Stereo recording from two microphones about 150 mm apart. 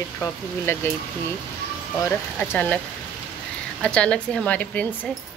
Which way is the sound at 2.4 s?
10° left (ahead or behind).